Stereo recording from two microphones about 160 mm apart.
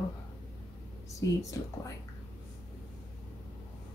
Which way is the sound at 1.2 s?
20° left (ahead or behind).